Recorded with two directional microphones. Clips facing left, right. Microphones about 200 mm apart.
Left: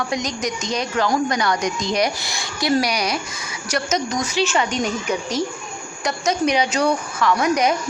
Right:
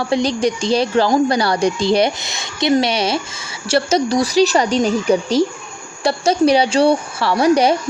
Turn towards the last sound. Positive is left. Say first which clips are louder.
# right 5 dB
turn(degrees=-30)  # may be behind; listen again after turning